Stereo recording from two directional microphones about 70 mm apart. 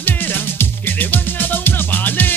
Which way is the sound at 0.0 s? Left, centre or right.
Left.